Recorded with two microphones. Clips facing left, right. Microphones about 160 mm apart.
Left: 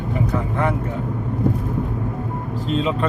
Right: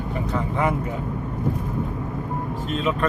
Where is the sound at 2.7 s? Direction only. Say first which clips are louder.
Left 3 dB; 25° left (ahead or behind).